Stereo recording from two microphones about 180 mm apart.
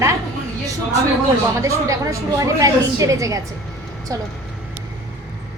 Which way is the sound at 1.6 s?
15° right (ahead or behind).